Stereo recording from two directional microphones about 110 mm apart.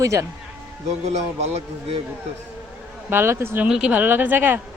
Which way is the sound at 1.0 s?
85° right.